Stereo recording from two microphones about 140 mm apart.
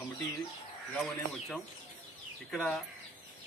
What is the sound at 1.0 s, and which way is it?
A man's voice, centre (ahead or behind).